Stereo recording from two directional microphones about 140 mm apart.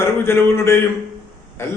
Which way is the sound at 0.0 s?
15° left (ahead or behind).